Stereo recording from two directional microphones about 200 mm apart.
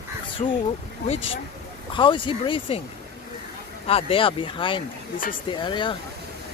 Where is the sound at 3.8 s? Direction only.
30° left (ahead or behind).